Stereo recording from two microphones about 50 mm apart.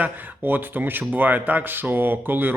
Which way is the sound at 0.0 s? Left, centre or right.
Right.